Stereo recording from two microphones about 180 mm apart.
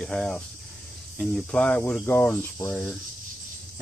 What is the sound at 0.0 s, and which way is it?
Speech, 5° left (ahead or behind).